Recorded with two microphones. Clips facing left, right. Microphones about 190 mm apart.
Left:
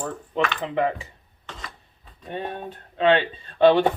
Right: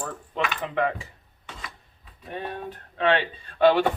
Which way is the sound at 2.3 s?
25° left (ahead or behind).